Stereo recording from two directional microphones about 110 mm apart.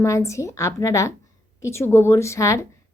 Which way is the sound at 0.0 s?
25° left (ahead or behind).